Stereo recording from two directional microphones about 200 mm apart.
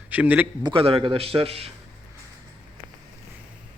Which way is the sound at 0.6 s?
25° right (ahead or behind).